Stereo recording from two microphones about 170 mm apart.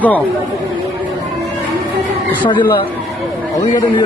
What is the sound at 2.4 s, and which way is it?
Speech, 30° left (ahead or behind).